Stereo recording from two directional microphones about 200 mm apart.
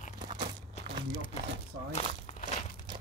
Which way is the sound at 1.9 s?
35° left (ahead or behind).